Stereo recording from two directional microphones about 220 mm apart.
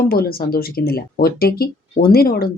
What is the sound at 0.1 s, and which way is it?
Speech, 45° left (ahead or behind).